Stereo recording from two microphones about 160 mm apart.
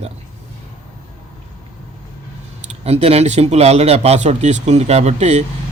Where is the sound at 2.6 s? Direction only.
40° right (ahead or behind).